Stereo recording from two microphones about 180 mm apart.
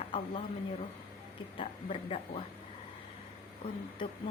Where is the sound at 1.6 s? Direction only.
35° left (ahead or behind).